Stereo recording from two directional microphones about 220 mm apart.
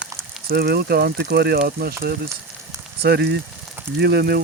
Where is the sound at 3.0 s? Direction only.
50° right (ahead or behind).